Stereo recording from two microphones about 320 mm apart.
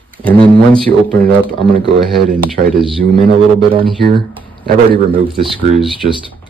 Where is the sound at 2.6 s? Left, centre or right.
Right.